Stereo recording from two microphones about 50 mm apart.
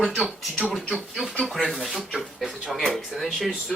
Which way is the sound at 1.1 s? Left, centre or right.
Centre.